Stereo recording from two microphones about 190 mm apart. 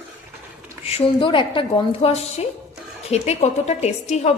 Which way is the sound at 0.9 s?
30° left (ahead or behind).